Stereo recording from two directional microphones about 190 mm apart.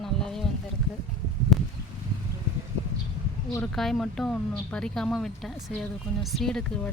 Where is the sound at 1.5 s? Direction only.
Centre (ahead or behind).